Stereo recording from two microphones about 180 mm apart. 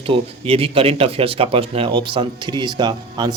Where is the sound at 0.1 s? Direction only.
30° right (ahead or behind).